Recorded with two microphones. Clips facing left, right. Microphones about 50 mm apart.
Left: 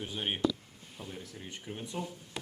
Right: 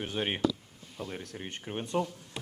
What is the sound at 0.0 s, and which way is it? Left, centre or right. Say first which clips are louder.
Speech: right 2 dB; right.